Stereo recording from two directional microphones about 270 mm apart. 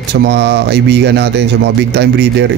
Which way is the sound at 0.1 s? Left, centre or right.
Right.